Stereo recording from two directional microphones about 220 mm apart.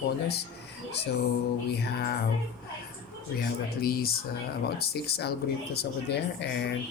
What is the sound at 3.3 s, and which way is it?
Speech, 45° left (ahead or behind).